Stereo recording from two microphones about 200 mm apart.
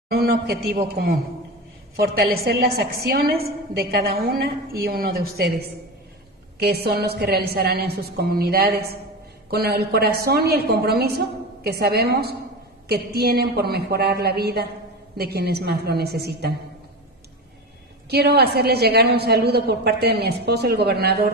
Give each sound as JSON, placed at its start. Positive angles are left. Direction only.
{"t": 0.1, "sound": "a man's voice", "side_deg": -50}
{"t": 2.4, "sound": "a woman's voice", "side_deg": -50}
{"t": 18.1, "sound": "a woman's voice", "side_deg": -55}